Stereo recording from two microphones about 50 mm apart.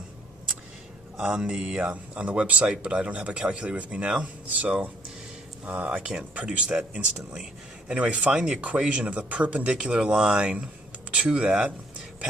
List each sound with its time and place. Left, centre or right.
1.1 s speech: right
7.9 s speech: right
9.7 s speech: centre